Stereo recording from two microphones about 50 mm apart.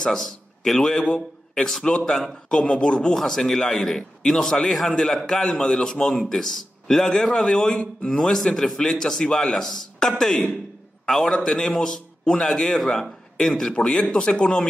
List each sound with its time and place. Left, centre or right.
0.0 s a man's voice: centre